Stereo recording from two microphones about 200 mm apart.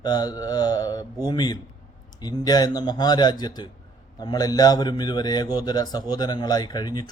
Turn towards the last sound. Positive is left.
turn(degrees=20)  # may be behind; listen again after turning